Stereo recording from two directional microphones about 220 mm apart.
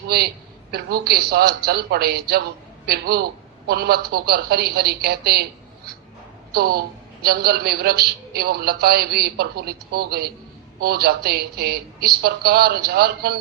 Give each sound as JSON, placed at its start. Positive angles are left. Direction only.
{"t": 0.1, "sound": "a man's voice", "side_deg": -45}